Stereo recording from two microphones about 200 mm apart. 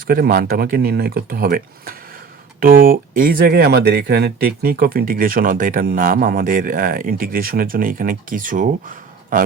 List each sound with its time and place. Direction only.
0.1 s speech: 50° right (ahead or behind)